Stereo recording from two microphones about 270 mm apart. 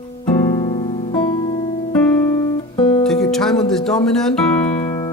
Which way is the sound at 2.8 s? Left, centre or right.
Left.